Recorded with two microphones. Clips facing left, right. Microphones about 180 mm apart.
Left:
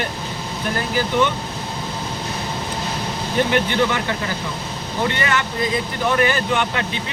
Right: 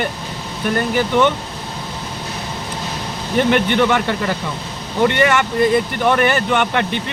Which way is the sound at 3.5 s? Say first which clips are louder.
Right 5 dB; 60° right (ahead or behind).